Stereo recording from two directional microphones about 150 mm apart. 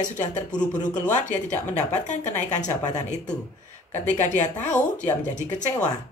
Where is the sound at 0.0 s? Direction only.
55° left (ahead or behind).